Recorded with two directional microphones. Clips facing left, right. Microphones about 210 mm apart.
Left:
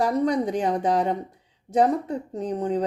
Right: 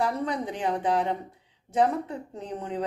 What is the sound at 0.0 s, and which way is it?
A woman's voice, 40° left (ahead or behind).